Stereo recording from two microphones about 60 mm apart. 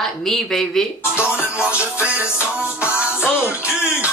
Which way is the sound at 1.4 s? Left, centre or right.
Left.